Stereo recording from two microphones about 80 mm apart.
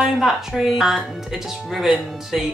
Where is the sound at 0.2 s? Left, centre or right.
Centre.